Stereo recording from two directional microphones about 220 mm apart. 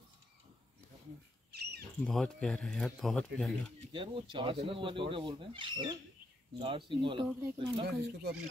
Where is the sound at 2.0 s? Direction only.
5° left (ahead or behind).